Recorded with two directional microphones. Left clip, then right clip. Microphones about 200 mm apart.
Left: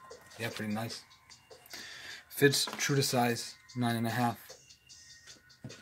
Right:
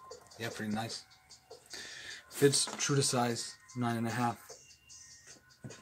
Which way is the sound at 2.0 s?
15° left (ahead or behind).